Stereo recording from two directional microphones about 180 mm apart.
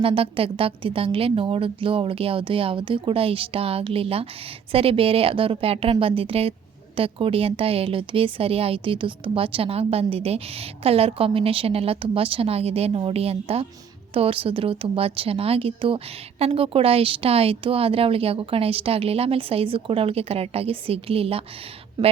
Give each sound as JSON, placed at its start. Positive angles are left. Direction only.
{"t": 0.0, "sound": "a woman's voice", "side_deg": -30}
{"t": 22.0, "sound": "speech", "side_deg": -20}